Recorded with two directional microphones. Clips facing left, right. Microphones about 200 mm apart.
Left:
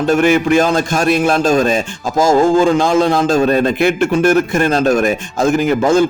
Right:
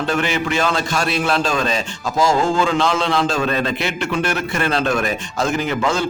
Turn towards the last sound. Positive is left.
turn(degrees=50)  # may be behind; listen again after turning